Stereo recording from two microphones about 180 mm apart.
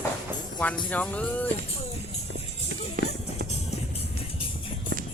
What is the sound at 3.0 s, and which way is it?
Music, 45° right (ahead or behind).